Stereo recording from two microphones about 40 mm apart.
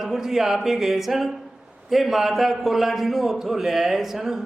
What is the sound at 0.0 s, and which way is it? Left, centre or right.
A man's voice, centre.